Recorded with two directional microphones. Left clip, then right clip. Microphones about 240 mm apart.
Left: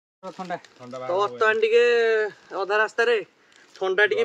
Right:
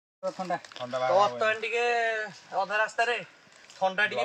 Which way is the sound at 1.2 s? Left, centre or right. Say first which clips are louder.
Left 9 dB; left.